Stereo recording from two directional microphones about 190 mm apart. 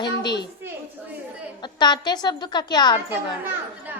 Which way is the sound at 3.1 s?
10° right (ahead or behind).